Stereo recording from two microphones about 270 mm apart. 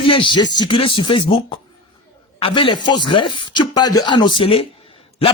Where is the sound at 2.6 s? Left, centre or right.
Centre.